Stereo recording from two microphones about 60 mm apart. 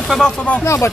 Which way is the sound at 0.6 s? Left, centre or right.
Left.